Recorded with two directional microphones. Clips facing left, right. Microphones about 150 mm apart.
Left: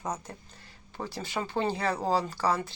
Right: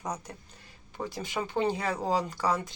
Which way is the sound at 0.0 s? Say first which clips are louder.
Left 1 dB; 15° right (ahead or behind).